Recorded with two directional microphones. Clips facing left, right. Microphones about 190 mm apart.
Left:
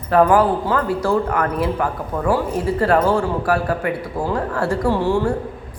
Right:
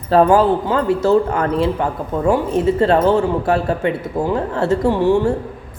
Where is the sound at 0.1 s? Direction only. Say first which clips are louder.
Right 2 dB; 25° right (ahead or behind).